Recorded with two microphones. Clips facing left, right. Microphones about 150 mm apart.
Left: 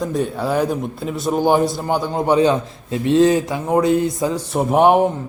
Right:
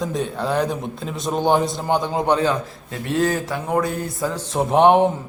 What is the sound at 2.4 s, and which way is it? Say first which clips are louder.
Speech: left 5 dB; 20° left (ahead or behind).